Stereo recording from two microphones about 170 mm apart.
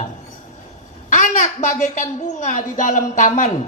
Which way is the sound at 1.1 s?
45° left (ahead or behind).